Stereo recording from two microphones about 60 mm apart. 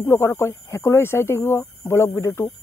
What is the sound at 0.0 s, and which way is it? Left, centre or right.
Speech, left.